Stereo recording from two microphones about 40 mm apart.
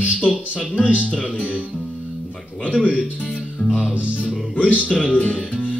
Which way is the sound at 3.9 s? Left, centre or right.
Right.